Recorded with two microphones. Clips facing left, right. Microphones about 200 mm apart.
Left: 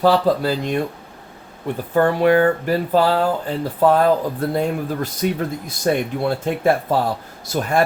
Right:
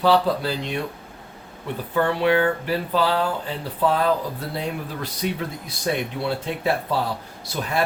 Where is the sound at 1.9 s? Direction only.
45° left (ahead or behind).